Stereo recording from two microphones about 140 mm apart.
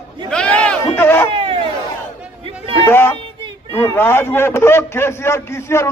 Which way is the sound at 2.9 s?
15° left (ahead or behind).